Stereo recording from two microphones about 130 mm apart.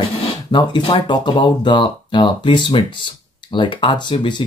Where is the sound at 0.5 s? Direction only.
35° left (ahead or behind).